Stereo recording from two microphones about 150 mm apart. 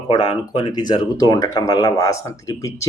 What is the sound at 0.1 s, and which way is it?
Speech, 30° left (ahead or behind).